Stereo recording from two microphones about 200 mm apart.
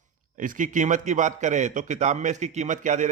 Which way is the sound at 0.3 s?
40° right (ahead or behind).